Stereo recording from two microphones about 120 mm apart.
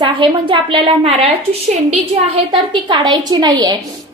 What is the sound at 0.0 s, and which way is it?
A woman's voice, 45° right (ahead or behind).